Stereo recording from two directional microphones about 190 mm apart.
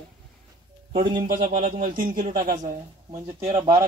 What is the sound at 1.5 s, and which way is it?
Speech, 45° right (ahead or behind).